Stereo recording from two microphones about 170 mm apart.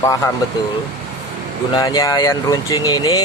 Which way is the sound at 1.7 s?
20° left (ahead or behind).